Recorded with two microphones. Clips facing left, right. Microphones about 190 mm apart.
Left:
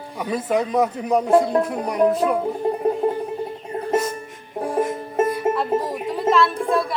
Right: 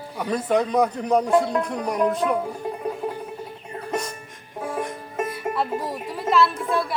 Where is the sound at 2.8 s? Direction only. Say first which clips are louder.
Left 8 dB; 30° left (ahead or behind).